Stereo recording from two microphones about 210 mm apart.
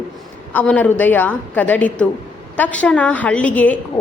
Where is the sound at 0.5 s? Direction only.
5° left (ahead or behind).